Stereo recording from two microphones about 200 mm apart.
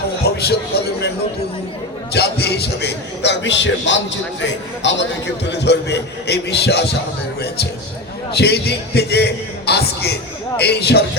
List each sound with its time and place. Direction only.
0.3 s a sound: 55° left (ahead or behind)
2.1 s a man's voice: 55° left (ahead or behind)
8.3 s a man's voice: 55° left (ahead or behind)